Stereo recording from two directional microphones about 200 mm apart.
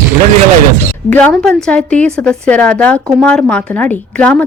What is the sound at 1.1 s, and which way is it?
Speech, 5° left (ahead or behind).